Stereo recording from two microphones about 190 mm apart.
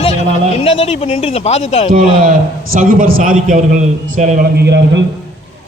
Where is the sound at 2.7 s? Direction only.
45° right (ahead or behind).